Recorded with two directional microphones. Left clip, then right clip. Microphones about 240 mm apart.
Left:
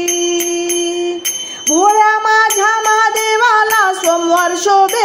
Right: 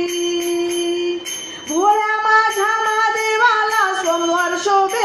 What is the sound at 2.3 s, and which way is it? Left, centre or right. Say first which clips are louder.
Music: left 4 dB; left.